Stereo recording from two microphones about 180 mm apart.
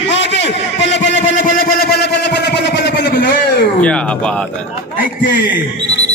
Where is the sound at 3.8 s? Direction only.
5° left (ahead or behind).